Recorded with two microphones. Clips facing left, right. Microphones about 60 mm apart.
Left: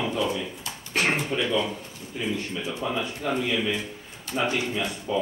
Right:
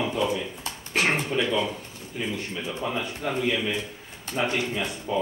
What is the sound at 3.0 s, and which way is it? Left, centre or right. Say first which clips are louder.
A man's voice: left 1 dB; centre.